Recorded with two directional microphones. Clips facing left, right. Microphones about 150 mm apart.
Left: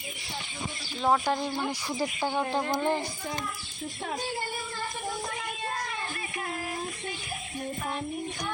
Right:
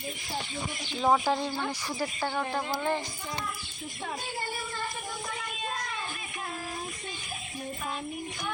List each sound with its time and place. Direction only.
1.0 s a woman's voice: 5° right (ahead or behind)
2.0 s speech: 15° left (ahead or behind)